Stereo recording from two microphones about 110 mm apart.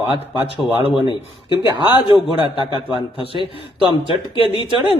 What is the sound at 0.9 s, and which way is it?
A man's voice, 45° left (ahead or behind).